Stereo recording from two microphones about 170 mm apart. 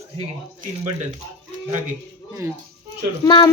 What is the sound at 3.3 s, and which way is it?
Speech, 25° left (ahead or behind).